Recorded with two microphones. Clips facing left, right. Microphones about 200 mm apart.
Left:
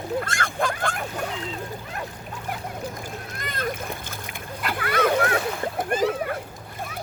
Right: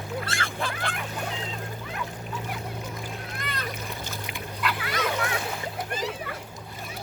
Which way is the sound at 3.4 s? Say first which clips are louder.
Left 8 dB; 45° left (ahead or behind).